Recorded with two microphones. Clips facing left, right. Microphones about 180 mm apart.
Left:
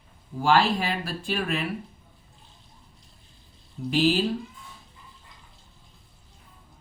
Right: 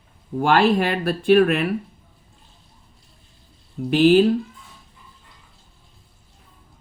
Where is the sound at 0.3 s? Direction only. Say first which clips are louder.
Right 5 dB; 60° right (ahead or behind).